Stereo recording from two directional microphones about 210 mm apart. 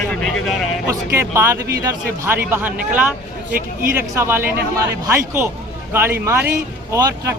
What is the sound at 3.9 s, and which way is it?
A man's voice, 10° right (ahead or behind).